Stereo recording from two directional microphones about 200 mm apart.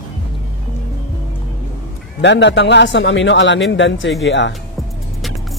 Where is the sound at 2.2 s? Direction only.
60° left (ahead or behind).